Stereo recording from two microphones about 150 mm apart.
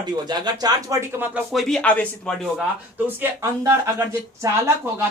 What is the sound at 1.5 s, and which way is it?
Speech, centre (ahead or behind).